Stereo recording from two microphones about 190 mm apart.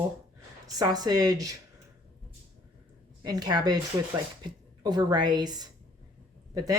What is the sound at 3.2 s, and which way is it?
A woman's voice, 20° right (ahead or behind).